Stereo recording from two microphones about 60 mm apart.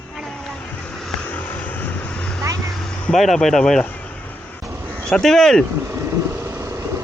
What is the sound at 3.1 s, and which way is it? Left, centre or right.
Speech, centre.